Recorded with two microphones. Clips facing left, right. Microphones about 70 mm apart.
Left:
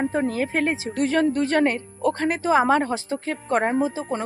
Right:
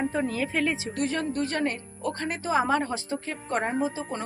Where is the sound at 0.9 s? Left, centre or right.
Left.